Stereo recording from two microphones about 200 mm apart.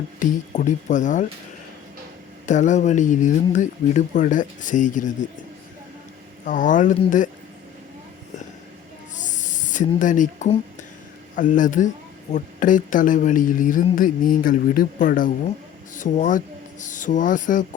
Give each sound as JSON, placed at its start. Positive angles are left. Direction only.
{"t": 0.2, "sound": "a woman's voice", "side_deg": 40}
{"t": 2.5, "sound": "a woman's voice", "side_deg": 35}
{"t": 6.4, "sound": "a woman's voice", "side_deg": 40}
{"t": 9.1, "sound": "snake", "side_deg": 40}
{"t": 11.3, "sound": "a woman's voice", "side_deg": 40}